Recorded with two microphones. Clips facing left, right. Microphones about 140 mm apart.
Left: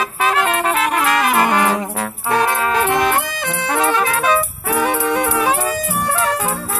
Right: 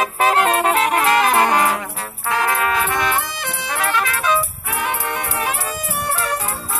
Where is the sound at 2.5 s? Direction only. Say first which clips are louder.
Left 2 dB; 25° left (ahead or behind).